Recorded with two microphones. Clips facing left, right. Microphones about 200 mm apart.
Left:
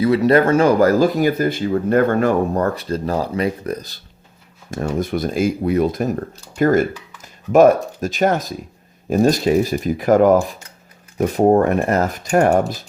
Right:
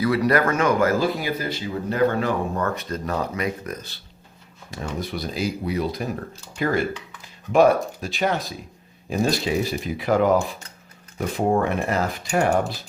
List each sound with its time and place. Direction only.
0.0 s speech: 25° left (ahead or behind); by 2.6 s 50° left (ahead or behind)
2.6 s speech: 30° left (ahead or behind)
4.7 s speech: 50° left (ahead or behind)